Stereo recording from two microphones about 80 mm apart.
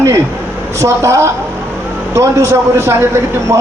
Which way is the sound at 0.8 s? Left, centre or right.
Right.